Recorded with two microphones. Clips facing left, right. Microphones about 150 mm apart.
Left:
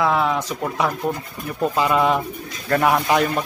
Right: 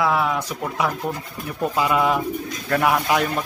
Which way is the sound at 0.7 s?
5° right (ahead or behind).